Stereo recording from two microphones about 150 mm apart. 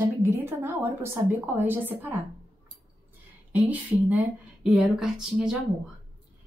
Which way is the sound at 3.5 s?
10° right (ahead or behind).